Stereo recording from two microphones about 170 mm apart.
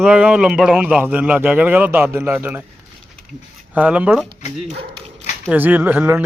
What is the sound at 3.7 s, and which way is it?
Speech, 10° right (ahead or behind).